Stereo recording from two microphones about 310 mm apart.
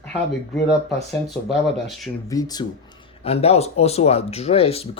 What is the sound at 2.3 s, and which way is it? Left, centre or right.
Speech, centre.